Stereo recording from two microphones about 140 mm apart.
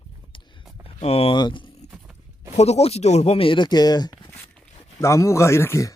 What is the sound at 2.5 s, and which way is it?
Speech, 50° left (ahead or behind).